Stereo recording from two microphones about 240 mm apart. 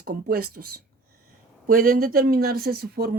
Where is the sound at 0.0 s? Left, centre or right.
Right.